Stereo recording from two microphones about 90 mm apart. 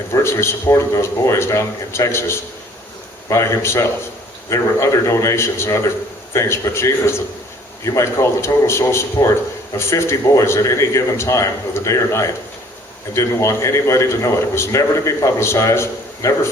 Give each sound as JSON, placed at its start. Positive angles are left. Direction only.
{"t": 0.1, "sound": "a man's voice", "side_deg": 30}